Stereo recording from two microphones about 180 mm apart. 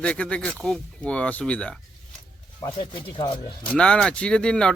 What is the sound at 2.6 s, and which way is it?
Speech, 25° left (ahead or behind).